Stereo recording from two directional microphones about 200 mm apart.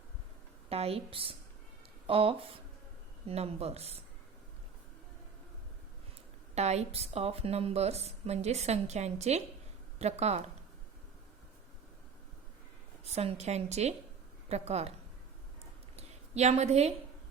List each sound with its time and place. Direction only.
0.7 s a woman's voice: 30° right (ahead or behind)
6.5 s a woman's voice: 35° right (ahead or behind)
13.1 s a woman's voice: 35° right (ahead or behind)
16.0 s a sound: 35° right (ahead or behind)